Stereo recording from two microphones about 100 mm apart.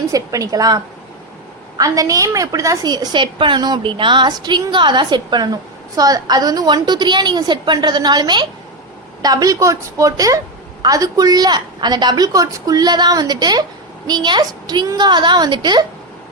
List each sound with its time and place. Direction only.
0.1 s a woman's voice: 35° right (ahead or behind)
1.8 s a woman's voice: 35° right (ahead or behind)